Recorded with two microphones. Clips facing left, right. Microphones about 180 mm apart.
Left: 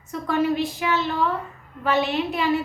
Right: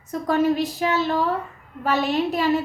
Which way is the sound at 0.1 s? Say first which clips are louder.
Right 2 dB; 40° right (ahead or behind).